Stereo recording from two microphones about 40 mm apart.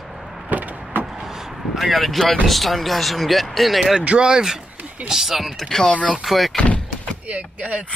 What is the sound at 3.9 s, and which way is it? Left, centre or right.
Speech, right.